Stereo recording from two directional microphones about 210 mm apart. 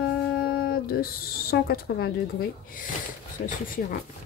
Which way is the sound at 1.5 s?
45° left (ahead or behind).